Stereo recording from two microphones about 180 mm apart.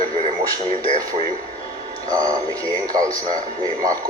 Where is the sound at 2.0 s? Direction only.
20° right (ahead or behind).